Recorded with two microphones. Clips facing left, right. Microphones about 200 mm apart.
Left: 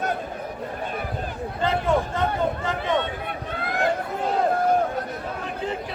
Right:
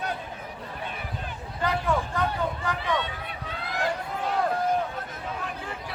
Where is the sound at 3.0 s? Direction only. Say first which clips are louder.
Left 5 dB; 55° left (ahead or behind).